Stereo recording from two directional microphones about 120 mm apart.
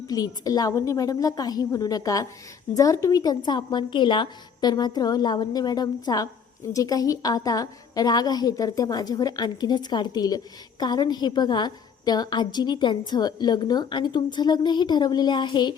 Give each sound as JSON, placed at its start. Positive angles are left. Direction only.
{"t": 0.1, "sound": "a woman's voice", "side_deg": 30}